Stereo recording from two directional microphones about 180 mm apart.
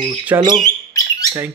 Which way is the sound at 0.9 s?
20° left (ahead or behind).